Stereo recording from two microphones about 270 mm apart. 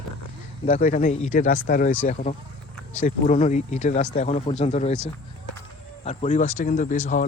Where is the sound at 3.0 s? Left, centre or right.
Left.